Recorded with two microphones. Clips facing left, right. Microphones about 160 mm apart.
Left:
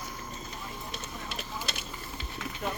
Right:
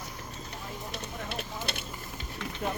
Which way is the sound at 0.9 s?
60° right (ahead or behind).